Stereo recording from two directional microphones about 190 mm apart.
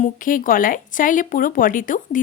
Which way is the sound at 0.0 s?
45° left (ahead or behind).